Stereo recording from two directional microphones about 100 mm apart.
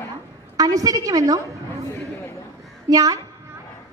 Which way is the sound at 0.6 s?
35° right (ahead or behind).